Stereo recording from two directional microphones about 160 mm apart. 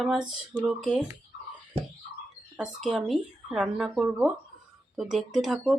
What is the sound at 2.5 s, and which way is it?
Speech, centre (ahead or behind).